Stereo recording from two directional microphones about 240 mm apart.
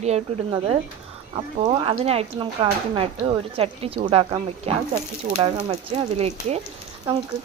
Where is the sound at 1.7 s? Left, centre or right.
Right.